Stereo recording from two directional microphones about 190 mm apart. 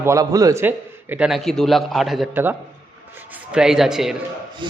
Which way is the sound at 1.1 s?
5° right (ahead or behind).